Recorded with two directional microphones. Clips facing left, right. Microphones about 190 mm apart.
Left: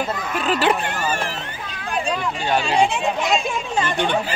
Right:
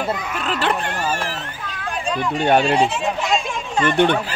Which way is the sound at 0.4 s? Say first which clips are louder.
Left 5 dB; 5° left (ahead or behind).